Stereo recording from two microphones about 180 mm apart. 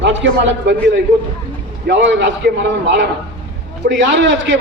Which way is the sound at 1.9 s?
80° right.